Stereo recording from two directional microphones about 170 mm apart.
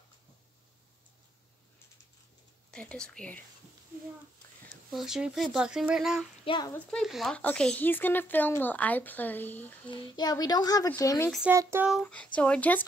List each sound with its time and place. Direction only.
2.7 s speech: 5° left (ahead or behind)
4.9 s speech: 5° right (ahead or behind)
6.4 s a child's voice: 30° left (ahead or behind)
6.7 s speech: 5° left (ahead or behind)
9.8 s a child's voice: 25° left (ahead or behind)
11.2 s speech: centre (ahead or behind)
11.5 s speech: 15° right (ahead or behind)
11.9 s speech: 5° left (ahead or behind)